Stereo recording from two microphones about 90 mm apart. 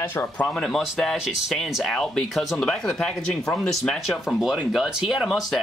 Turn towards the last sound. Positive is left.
turn(degrees=0)  # may be behind; listen again after turning